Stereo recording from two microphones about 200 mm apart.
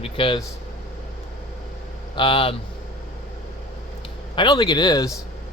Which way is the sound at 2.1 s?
25° left (ahead or behind).